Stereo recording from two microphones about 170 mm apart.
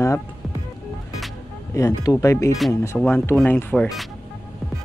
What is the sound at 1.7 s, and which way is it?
Speech, 20° left (ahead or behind).